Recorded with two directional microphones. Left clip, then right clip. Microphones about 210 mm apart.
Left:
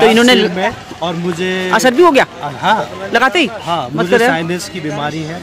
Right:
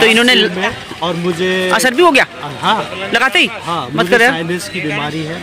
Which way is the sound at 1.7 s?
5° left (ahead or behind).